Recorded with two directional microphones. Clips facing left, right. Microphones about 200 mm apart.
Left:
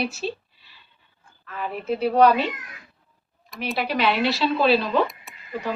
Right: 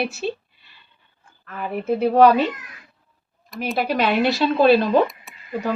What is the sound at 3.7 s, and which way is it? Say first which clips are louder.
A woman's voice: right 3 dB; 45° right (ahead or behind).